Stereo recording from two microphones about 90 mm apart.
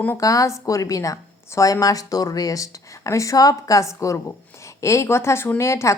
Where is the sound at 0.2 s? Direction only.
40° left (ahead or behind).